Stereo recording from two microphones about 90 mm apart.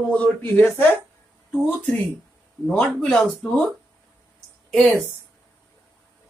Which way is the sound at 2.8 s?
10° left (ahead or behind).